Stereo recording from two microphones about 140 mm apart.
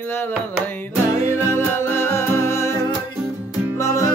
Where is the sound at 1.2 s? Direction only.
20° left (ahead or behind).